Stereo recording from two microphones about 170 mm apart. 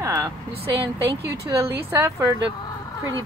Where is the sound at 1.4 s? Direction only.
15° right (ahead or behind).